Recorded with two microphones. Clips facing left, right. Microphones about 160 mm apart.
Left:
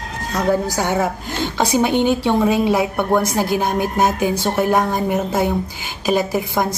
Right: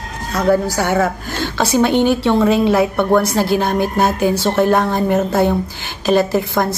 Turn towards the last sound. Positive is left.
turn(degrees=10)  # may be behind; listen again after turning